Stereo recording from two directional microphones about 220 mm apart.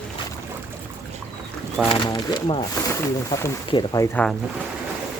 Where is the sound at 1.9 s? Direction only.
20° left (ahead or behind).